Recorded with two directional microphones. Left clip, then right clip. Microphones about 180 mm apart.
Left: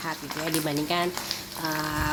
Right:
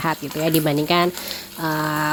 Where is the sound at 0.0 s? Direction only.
45° right (ahead or behind).